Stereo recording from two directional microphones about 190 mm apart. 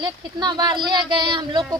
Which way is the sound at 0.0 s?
20° right (ahead or behind).